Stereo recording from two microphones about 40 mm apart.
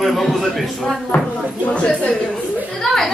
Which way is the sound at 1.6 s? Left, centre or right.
Left.